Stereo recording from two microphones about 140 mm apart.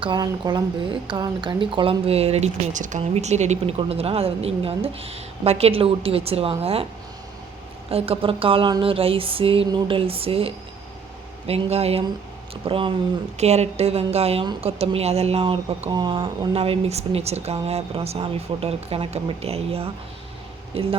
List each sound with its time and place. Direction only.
0.0 s a woman's voice: 35° right (ahead or behind)
7.9 s a woman's voice: 45° right (ahead or behind)
13.3 s a woman's voice: 50° right (ahead or behind); by 16.5 s 30° right (ahead or behind)
16.5 s a woman's voice: 45° right (ahead or behind)